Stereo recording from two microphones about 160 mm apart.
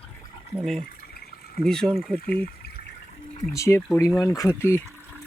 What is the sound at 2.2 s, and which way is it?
Speech, 65° left (ahead or behind).